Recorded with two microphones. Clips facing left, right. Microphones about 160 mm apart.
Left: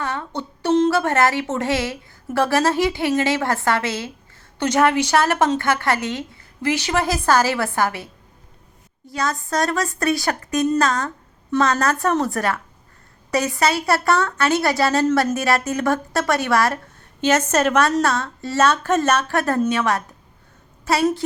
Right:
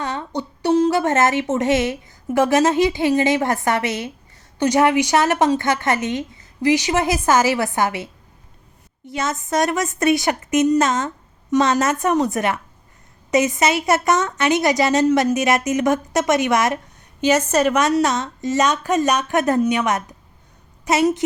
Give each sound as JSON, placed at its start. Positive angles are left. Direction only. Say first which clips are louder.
{"t": 0.0, "sound": "a woman's voice", "louder": "right 1 dB", "side_deg": -15}
{"t": 9.0, "sound": "a woman's voice", "louder": "right 1 dB", "side_deg": -20}